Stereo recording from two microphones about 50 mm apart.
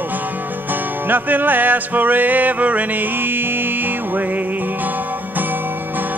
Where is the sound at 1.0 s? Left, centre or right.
Right.